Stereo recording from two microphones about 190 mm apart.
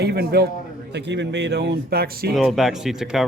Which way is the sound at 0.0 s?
60° right (ahead or behind).